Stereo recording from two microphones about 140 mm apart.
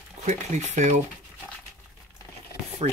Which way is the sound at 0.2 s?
55° right (ahead or behind).